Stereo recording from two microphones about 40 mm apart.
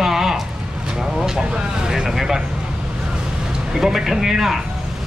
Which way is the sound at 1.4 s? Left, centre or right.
Centre.